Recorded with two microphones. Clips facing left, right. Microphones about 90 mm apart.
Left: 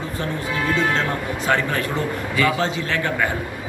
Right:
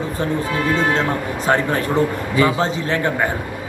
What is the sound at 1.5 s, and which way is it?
Speech, 30° right (ahead or behind).